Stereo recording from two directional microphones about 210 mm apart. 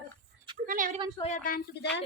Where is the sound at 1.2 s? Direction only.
40° left (ahead or behind).